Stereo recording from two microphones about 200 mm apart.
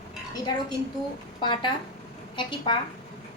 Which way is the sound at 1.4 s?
25° left (ahead or behind).